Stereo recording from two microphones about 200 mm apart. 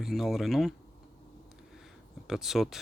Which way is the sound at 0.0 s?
Centre (ahead or behind).